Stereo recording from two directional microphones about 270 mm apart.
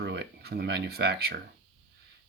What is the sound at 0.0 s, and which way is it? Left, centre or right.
Speech, right.